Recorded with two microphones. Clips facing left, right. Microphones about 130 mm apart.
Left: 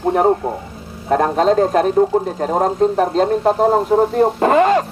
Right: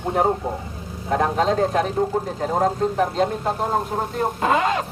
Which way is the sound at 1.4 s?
50° left (ahead or behind).